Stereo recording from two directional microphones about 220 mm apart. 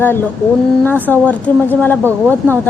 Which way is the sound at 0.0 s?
10° left (ahead or behind).